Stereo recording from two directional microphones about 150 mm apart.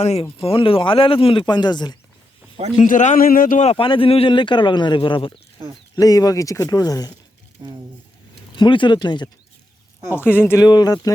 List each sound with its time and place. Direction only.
0.0 s speech: 45° left (ahead or behind); by 2.0 s 30° left (ahead or behind)
2.8 s speech: 60° left (ahead or behind)
3.7 s speech: 35° left (ahead or behind)
6.0 s speech: 25° left (ahead or behind)
7.6 s speech: 25° right (ahead or behind)
8.5 s speech: 30° left (ahead or behind)
10.2 s speech: 15° left (ahead or behind)
10.7 s speech: 25° left (ahead or behind)